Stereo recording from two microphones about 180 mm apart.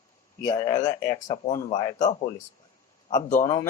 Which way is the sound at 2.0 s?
40° left (ahead or behind).